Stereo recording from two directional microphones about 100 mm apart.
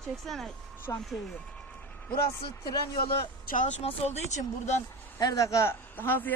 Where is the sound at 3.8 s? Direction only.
90° left.